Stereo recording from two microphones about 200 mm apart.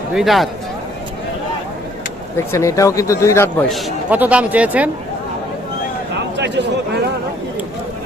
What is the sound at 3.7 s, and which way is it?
Speech, 5° right (ahead or behind).